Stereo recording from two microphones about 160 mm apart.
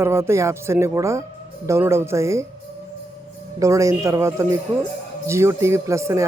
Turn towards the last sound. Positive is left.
turn(degrees=-20)  # may be behind; listen again after turning